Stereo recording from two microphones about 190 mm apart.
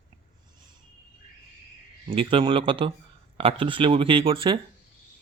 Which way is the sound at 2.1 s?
25° right (ahead or behind).